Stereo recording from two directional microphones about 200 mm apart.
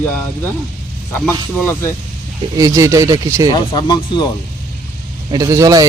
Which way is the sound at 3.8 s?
20° left (ahead or behind).